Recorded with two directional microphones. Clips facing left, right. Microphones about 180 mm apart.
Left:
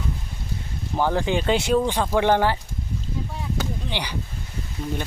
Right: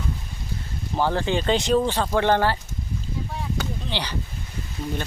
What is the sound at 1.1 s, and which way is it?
Speech, 10° left (ahead or behind).